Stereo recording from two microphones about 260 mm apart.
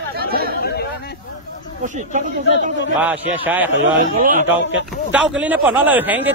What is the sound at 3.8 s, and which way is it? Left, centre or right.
Speech, right.